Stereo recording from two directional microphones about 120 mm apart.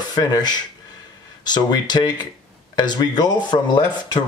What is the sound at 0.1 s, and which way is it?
Speech, 35° left (ahead or behind).